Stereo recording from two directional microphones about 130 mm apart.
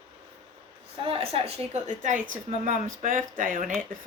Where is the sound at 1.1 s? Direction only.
45° right (ahead or behind).